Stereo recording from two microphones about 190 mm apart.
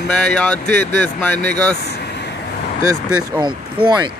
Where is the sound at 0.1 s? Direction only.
5° left (ahead or behind).